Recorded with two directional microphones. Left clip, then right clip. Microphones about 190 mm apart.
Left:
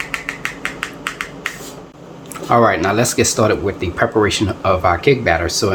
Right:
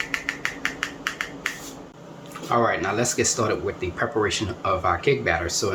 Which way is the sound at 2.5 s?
55° left (ahead or behind).